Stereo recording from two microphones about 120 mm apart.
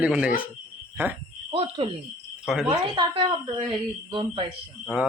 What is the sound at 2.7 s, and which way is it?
Speech, 40° right (ahead or behind).